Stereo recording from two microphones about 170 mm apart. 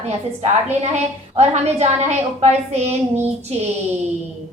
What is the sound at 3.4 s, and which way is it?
Speech, 40° right (ahead or behind).